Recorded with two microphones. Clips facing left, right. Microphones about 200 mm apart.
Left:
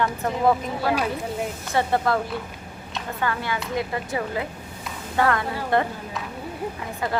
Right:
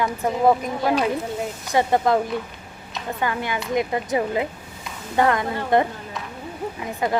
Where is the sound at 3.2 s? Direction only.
15° right (ahead or behind).